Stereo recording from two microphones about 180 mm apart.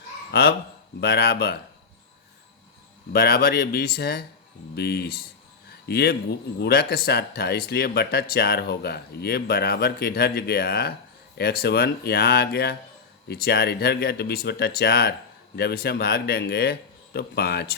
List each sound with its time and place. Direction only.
0.3 s speech: 65° left (ahead or behind)
3.1 s a man's voice: 60° left (ahead or behind)